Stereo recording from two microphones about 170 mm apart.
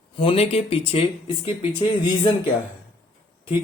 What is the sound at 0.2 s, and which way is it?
Speech, 35° left (ahead or behind).